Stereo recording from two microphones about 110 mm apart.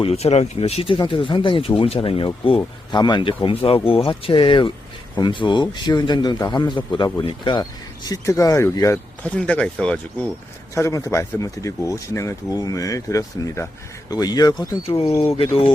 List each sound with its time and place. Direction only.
0.0 s speech: 75° left (ahead or behind)
0.9 s speech: 50° left (ahead or behind)
2.9 s a man's voice: 40° left (ahead or behind)
9.2 s speech: 10° left (ahead or behind)
10.8 s a man's voice: 25° left (ahead or behind)
14.8 s speech: 60° left (ahead or behind)